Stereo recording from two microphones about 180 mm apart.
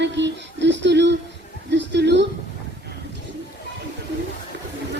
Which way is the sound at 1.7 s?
75° right (ahead or behind).